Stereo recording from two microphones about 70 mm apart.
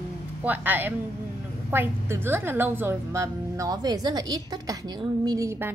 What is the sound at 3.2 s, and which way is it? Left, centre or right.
A woman's voice, right.